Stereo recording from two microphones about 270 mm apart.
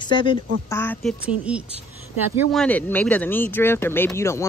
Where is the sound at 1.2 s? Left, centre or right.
Centre.